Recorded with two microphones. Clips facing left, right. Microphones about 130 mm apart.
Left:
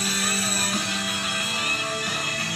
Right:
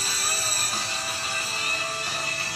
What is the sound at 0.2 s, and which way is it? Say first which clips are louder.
Music: left 5 dB; 30° right (ahead or behind).